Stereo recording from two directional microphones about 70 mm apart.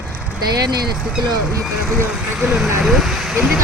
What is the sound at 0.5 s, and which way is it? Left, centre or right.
Speech, right.